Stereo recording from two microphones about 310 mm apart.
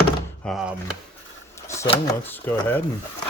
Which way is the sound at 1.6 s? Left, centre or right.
Centre.